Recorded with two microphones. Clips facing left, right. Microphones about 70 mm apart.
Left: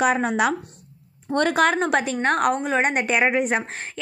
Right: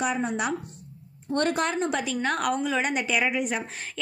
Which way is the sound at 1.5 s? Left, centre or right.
Left.